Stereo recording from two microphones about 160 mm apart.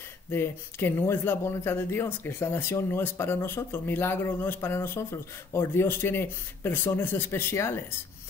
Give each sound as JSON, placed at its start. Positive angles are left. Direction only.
{"t": 0.3, "sound": "speech", "side_deg": 15}